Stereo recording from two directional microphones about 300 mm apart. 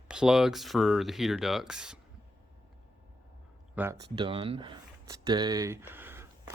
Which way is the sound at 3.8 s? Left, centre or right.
Centre.